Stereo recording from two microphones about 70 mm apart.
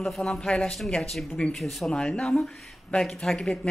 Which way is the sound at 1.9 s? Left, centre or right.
Centre.